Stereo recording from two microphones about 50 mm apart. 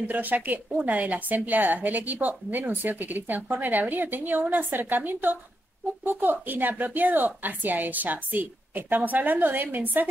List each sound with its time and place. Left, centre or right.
0.1 s a woman's voice: right